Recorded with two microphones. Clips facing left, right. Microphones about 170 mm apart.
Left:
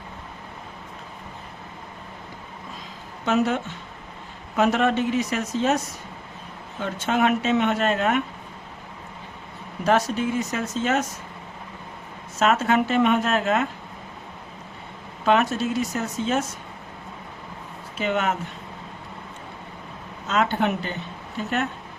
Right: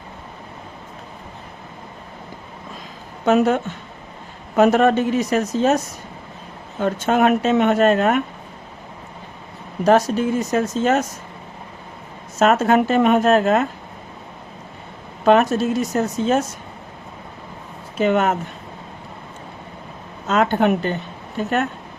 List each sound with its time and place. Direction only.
3.2 s speech: 50° right (ahead or behind)
9.8 s speech: 40° right (ahead or behind)
12.4 s speech: 45° right (ahead or behind)
15.2 s speech: 45° right (ahead or behind)
17.9 s speech: 45° right (ahead or behind)
20.2 s speech: 50° right (ahead or behind)